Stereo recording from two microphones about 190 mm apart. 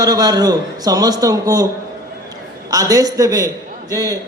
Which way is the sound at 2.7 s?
20° right (ahead or behind).